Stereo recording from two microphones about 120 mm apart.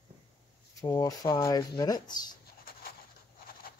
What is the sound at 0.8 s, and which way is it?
Speech, 30° left (ahead or behind).